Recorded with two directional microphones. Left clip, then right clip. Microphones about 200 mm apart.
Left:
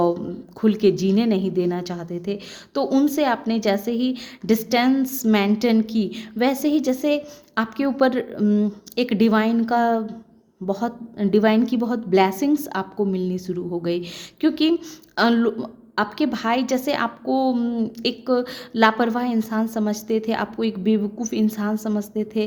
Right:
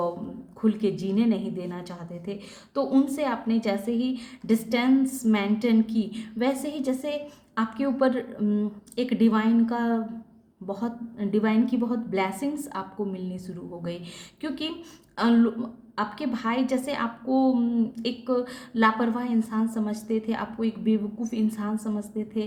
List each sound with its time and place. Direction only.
0.6 s a woman's voice: 45° left (ahead or behind)